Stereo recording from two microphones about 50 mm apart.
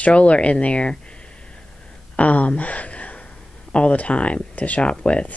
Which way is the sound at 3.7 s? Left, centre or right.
Left.